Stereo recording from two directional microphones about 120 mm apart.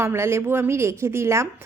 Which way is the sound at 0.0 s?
20° right (ahead or behind).